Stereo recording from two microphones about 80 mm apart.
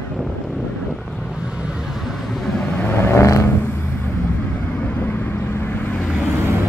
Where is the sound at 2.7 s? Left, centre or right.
Left.